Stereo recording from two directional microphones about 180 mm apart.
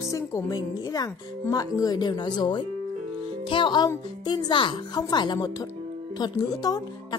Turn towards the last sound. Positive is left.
turn(degrees=20)  # may be behind; listen again after turning